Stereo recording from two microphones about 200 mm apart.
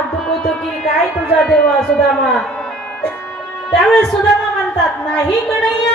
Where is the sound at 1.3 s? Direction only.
Centre (ahead or behind).